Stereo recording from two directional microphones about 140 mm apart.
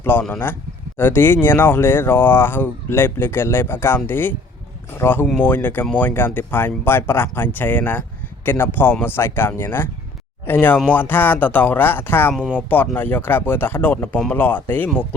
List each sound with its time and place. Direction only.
0.0 s speech: 15° left (ahead or behind)
12.3 s speech: 5° right (ahead or behind)
12.6 s speech: 15° left (ahead or behind)